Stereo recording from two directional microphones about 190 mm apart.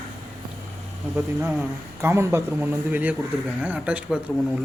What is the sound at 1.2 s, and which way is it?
Speech, 5° right (ahead or behind).